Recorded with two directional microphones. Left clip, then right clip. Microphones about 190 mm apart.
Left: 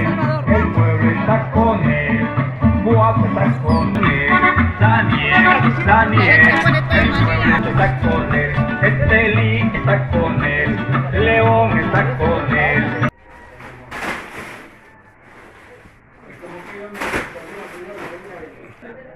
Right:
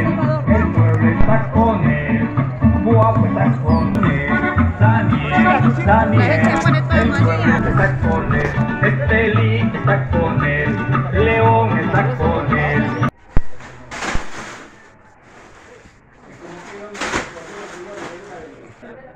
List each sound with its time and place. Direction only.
0.0 s music: 10° left (ahead or behind)
3.7 s music: centre (ahead or behind)
4.0 s music: 60° right (ahead or behind); by 7.5 s 35° right (ahead or behind)
7.5 s music: 45° right (ahead or behind)